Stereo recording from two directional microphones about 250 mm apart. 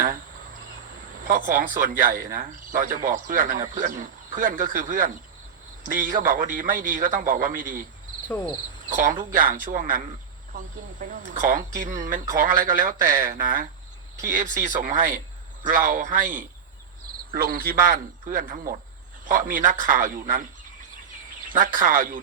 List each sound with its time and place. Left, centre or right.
1.3 s speech: right
8.9 s speech: right
11.0 s speech: right
14.2 s speech: right
21.5 s speech: right